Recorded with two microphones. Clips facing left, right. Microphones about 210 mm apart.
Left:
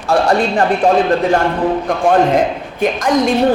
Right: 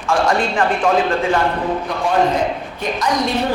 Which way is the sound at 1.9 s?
50° left (ahead or behind).